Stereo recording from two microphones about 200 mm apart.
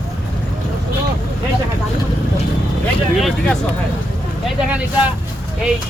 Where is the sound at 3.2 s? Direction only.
Centre (ahead or behind).